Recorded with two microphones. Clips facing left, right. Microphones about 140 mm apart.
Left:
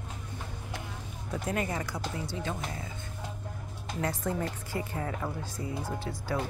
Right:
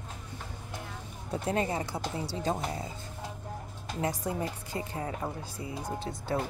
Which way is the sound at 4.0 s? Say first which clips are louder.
Even; 15° right (ahead or behind).